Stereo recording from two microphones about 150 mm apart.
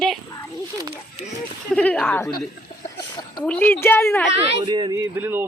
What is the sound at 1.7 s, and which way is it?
Speech, 10° left (ahead or behind).